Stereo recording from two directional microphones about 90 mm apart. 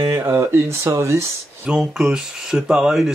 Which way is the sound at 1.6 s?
10° right (ahead or behind).